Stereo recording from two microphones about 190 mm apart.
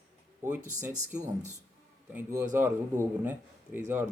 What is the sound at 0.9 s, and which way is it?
Speech, 40° right (ahead or behind).